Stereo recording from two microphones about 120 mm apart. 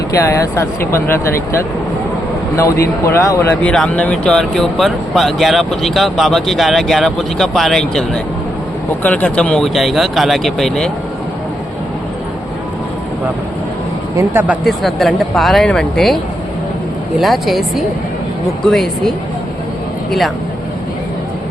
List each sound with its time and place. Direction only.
0.3 s a man's voice: 20° left (ahead or behind)
2.6 s a man's voice: 25° left (ahead or behind)
3.6 s speech: 10° left (ahead or behind)
14.6 s speech: centre (ahead or behind)